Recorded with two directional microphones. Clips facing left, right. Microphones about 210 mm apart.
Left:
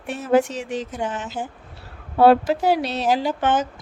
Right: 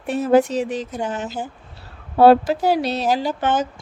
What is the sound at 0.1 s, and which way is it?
A woman's voice, 35° right (ahead or behind).